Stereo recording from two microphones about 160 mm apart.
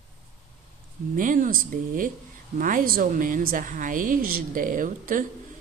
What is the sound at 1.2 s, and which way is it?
Speech, 55° right (ahead or behind).